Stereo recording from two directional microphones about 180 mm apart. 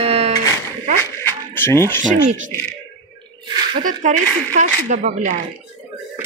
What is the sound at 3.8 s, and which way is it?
Speech, 45° right (ahead or behind).